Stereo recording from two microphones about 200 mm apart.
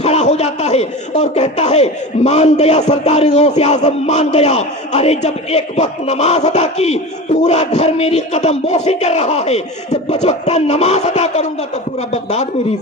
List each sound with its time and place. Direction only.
0.0 s a man's voice: 35° left (ahead or behind)